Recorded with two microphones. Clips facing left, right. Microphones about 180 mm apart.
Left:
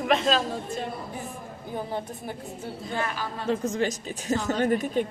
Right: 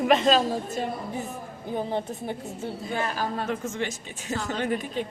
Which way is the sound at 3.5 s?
40° left (ahead or behind).